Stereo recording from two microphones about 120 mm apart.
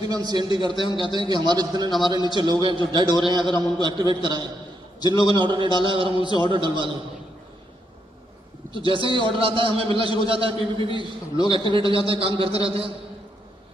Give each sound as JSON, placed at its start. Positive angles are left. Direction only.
{"t": 0.1, "sound": "a man's voice", "side_deg": -35}
{"t": 0.7, "sound": "a man's voice", "side_deg": 45}
{"t": 1.1, "sound": "a man's voice", "side_deg": -35}
{"t": 3.1, "sound": "a man's voice", "side_deg": 35}
{"t": 3.3, "sound": "a man's voice", "side_deg": -40}
{"t": 5.0, "sound": "a man's voice", "side_deg": 35}
{"t": 5.3, "sound": "a man's voice", "side_deg": -40}
{"t": 6.1, "sound": "a man's voice", "side_deg": 40}
{"t": 6.5, "sound": "a man's voice", "side_deg": -40}
{"t": 8.7, "sound": "a man's voice", "side_deg": -45}